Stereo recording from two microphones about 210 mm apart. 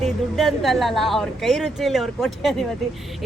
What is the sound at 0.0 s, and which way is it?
A woman's voice, centre (ahead or behind).